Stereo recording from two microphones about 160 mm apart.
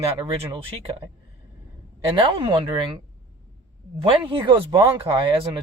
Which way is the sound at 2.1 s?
30° right (ahead or behind).